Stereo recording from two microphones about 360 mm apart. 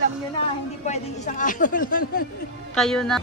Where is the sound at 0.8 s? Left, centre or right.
Centre.